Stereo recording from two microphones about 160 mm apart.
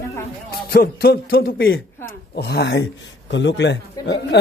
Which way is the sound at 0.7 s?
75° left (ahead or behind).